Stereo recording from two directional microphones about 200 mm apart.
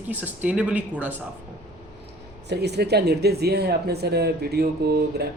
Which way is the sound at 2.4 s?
55° right (ahead or behind).